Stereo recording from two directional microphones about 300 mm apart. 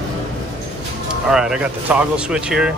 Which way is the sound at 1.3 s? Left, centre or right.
Centre.